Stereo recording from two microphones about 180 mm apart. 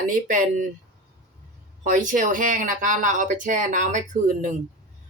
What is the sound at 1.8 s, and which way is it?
Speech, 45° right (ahead or behind).